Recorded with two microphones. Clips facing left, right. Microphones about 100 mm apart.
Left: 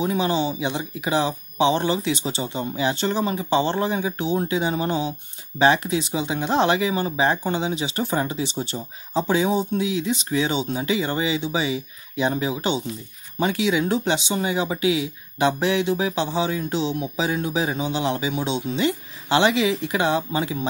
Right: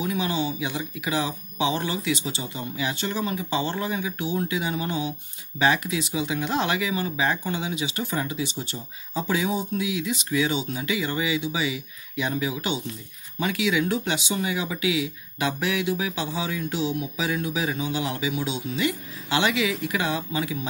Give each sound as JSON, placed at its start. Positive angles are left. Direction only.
{"t": 0.0, "sound": "speech", "side_deg": 30}